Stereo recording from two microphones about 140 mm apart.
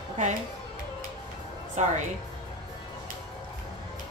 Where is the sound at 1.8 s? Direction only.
55° right (ahead or behind).